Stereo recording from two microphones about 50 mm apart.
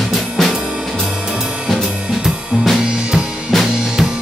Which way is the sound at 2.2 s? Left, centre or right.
Centre.